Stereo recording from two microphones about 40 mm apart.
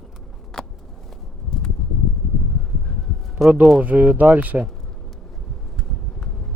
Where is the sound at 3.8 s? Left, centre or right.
Right.